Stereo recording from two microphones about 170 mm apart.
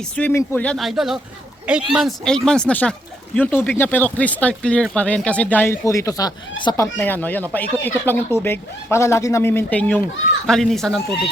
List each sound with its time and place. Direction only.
0.2 s speech: 10° left (ahead or behind); by 6.8 s 25° left (ahead or behind)
6.8 s speech: 10° left (ahead or behind)